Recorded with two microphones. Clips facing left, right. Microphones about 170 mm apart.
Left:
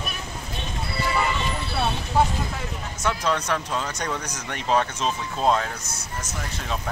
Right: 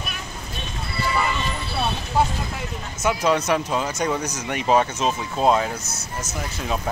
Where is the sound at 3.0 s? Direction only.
10° right (ahead or behind).